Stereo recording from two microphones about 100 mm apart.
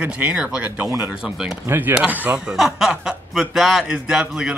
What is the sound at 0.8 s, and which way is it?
Speech, 25° right (ahead or behind).